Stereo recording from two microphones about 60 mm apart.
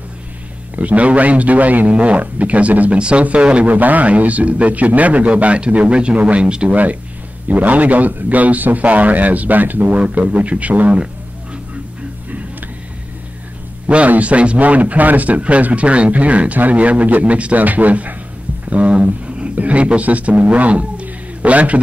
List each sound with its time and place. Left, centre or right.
0.7 s speech: right
13.8 s speech: right